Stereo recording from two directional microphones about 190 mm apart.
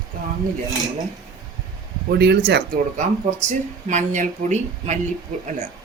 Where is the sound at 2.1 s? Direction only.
60° right (ahead or behind).